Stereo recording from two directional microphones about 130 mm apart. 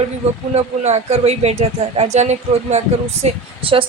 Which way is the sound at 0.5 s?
55° right (ahead or behind).